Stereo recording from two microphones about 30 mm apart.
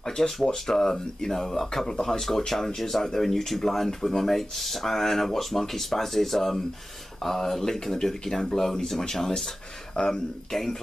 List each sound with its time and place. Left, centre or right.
0.0 s speech: centre